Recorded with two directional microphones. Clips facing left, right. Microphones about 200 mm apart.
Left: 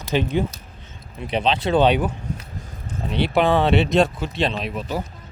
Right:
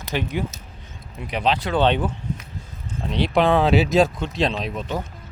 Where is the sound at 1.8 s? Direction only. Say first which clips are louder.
Even; 10° left (ahead or behind).